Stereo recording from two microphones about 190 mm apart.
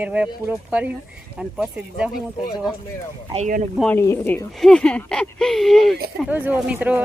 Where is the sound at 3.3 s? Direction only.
35° right (ahead or behind).